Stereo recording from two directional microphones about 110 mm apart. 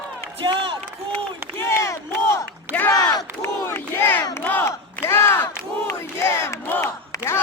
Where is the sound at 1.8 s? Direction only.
30° left (ahead or behind).